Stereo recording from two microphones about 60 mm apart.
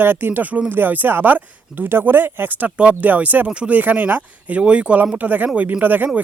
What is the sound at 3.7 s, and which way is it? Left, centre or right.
Speech, right.